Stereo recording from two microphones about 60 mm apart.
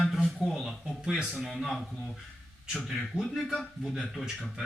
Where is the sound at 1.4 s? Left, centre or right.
Centre.